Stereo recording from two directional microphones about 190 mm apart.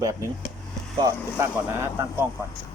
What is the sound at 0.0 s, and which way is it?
Speech, 15° right (ahead or behind).